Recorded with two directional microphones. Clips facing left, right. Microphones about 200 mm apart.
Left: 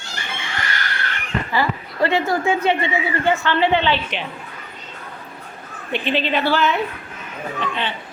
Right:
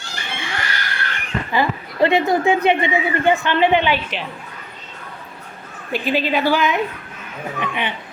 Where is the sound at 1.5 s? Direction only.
20° right (ahead or behind).